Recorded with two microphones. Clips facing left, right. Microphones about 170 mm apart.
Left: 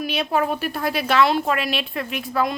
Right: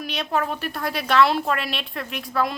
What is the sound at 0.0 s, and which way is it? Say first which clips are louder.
Speech: left 3 dB; 5° left (ahead or behind).